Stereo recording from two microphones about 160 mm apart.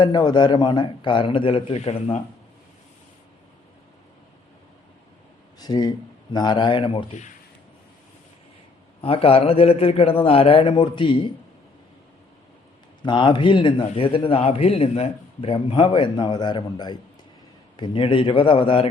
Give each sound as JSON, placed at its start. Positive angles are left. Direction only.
{"t": 0.0, "sound": "a man's voice", "side_deg": 25}
{"t": 5.5, "sound": "a man's voice", "side_deg": 25}
{"t": 9.0, "sound": "a man's voice", "side_deg": 35}
{"t": 13.0, "sound": "a man's voice", "side_deg": 30}